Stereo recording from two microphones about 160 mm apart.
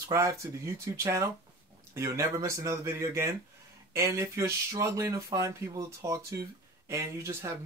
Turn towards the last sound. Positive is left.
turn(degrees=-15)  # may be behind; listen again after turning